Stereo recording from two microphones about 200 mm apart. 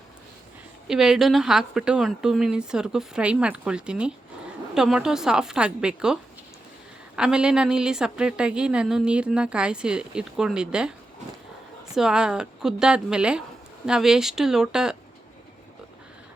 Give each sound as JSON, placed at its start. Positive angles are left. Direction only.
{"t": 0.9, "sound": "a woman's voice", "side_deg": 0}
{"t": 7.2, "sound": "a woman's voice", "side_deg": -5}
{"t": 11.9, "sound": "a woman's voice", "side_deg": -5}